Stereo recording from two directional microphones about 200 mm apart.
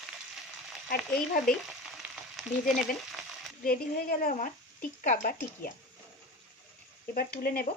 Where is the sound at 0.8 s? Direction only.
45° left (ahead or behind).